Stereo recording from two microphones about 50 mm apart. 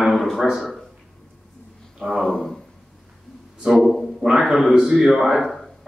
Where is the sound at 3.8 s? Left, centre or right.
Centre.